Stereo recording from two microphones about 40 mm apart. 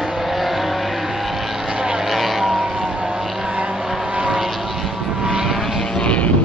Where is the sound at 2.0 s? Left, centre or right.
Centre.